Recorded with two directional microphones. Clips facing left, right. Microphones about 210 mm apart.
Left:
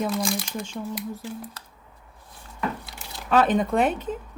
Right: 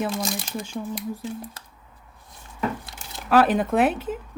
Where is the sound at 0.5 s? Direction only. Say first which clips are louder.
Right 1 dB; 5° right (ahead or behind).